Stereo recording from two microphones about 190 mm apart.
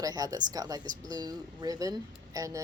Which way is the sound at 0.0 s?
20° right (ahead or behind).